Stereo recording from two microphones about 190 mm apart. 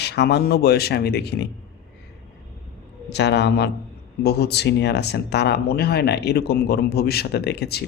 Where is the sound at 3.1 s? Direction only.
65° left (ahead or behind).